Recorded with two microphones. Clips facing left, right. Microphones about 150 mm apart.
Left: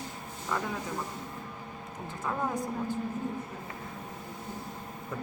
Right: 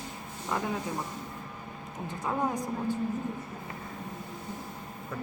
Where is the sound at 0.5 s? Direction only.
20° right (ahead or behind).